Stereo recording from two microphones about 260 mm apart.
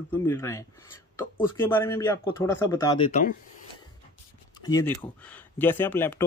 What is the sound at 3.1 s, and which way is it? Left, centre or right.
Speech, left.